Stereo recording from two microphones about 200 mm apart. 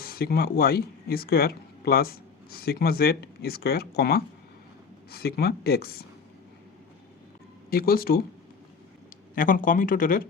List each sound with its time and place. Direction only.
0.0 s speech: 50° left (ahead or behind)
7.7 s speech: 50° left (ahead or behind)
9.3 s speech: 45° left (ahead or behind)